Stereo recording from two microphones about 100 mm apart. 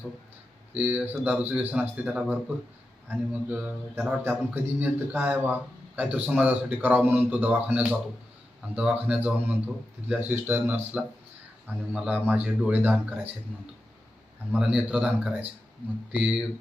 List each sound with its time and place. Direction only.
0.7 s speech: 15° right (ahead or behind)
14.5 s speech: 10° right (ahead or behind)